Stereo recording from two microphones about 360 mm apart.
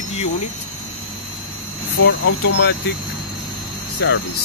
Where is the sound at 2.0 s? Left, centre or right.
Left.